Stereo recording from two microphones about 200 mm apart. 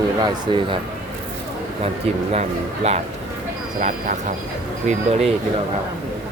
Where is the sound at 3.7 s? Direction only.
40° right (ahead or behind).